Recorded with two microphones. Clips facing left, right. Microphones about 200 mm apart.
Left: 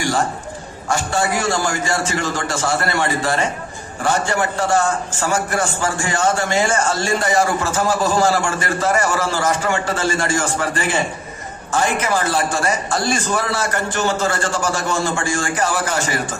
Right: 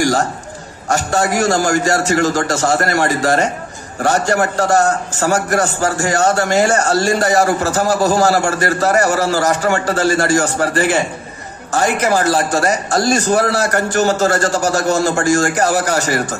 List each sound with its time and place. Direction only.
0.0 s a man's voice: 40° right (ahead or behind)